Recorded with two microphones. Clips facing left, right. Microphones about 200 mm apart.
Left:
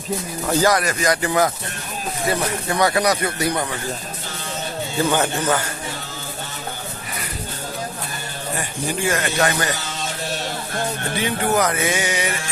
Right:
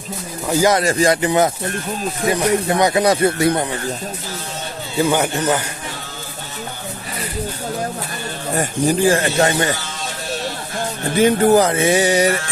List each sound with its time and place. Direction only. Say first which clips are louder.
0.4 s speech: right 3 dB; 20° right (ahead or behind)
4.9 s speech: right 3 dB; 10° right (ahead or behind)
8.5 s speech: right 9 dB; 35° right (ahead or behind)
11.2 s speech: right 9 dB; 40° right (ahead or behind)
11.6 s music: right 6 dB; 30° right (ahead or behind)